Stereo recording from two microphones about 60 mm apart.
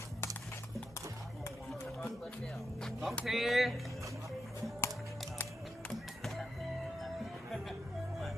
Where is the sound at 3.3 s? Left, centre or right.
Centre.